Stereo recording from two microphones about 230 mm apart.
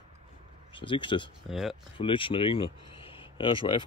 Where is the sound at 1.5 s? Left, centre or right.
Centre.